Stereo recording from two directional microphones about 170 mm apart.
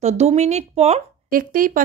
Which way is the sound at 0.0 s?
40° right (ahead or behind).